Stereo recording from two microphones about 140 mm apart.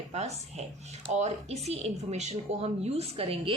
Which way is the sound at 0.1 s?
50° right (ahead or behind).